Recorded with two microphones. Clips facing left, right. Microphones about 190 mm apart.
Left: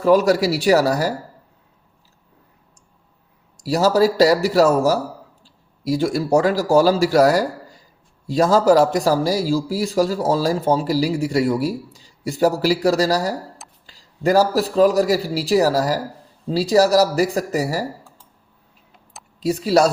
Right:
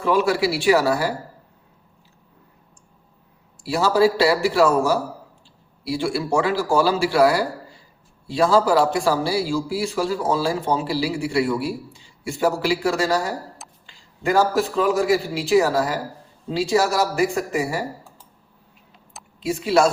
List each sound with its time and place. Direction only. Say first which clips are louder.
0.0 s a man's voice: left 4 dB; 40° left (ahead or behind)
3.6 s a man's voice: left 2 dB; 40° left (ahead or behind)
19.4 s a man's voice: left 2 dB; 40° left (ahead or behind)